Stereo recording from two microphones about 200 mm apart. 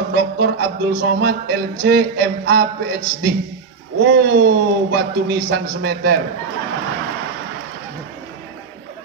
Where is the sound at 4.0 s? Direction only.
50° right (ahead or behind).